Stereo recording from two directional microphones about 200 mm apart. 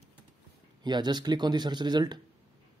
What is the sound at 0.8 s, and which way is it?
A man's voice, 20° right (ahead or behind).